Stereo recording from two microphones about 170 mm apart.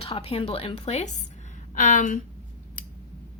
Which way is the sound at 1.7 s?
50° left (ahead or behind).